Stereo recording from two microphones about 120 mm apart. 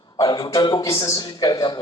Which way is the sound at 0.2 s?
35° left (ahead or behind).